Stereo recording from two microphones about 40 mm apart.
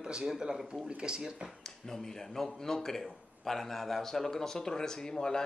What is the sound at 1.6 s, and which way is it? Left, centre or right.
Speech, centre.